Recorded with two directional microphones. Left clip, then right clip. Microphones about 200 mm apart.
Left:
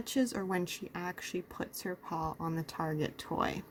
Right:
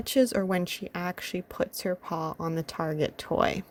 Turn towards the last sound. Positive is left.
turn(degrees=-40)  # may be behind; listen again after turning